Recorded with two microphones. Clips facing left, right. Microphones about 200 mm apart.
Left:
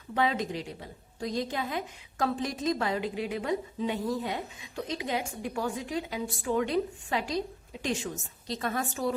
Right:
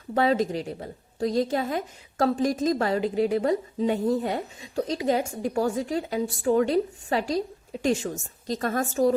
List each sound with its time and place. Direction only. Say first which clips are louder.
0.1 s a woman's voice: right 6 dB; 40° right (ahead or behind)